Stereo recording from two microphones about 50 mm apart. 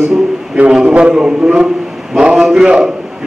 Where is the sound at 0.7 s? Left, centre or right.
Centre.